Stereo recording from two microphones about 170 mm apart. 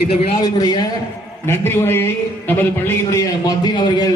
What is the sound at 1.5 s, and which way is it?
A man's voice, 15° left (ahead or behind).